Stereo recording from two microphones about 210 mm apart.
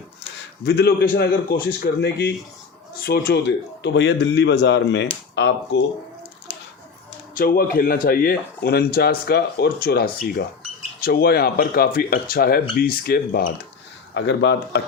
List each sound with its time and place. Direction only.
0.6 s a man's voice: 50° left (ahead or behind)
7.3 s speech: 45° left (ahead or behind)
14.1 s a man's voice: 55° left (ahead or behind)